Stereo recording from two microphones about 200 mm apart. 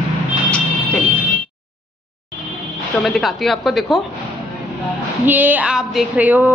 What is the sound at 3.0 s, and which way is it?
A woman's voice, centre (ahead or behind).